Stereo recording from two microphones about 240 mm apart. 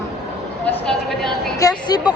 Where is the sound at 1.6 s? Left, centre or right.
Centre.